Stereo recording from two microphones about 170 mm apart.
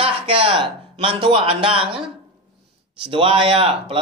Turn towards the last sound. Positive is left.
turn(degrees=-35)  # may be behind; listen again after turning